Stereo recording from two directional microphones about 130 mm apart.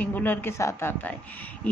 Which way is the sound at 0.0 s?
15° left (ahead or behind).